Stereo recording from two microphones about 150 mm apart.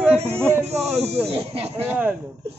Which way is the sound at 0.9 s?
45° right (ahead or behind).